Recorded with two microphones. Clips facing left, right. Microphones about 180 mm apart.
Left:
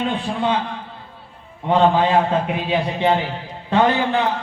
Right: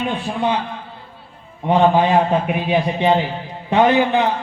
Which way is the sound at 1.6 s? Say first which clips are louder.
Right 1 dB; 15° right (ahead or behind).